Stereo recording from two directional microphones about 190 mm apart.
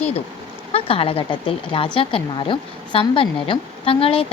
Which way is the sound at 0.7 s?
30° left (ahead or behind).